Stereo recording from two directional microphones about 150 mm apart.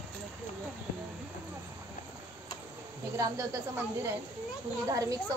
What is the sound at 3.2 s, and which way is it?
A woman's voice, 20° right (ahead or behind).